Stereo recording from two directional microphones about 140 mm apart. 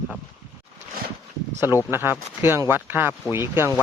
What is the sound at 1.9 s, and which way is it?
Speech, 15° right (ahead or behind).